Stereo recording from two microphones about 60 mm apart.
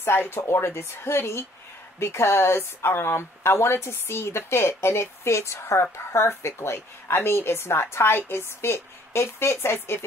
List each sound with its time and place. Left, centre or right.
0.0 s speech: left